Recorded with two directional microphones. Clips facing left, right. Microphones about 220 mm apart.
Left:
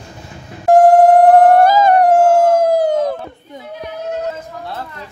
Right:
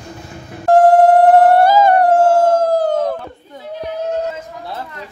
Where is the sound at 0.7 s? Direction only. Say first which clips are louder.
Left 1 dB; 15° left (ahead or behind).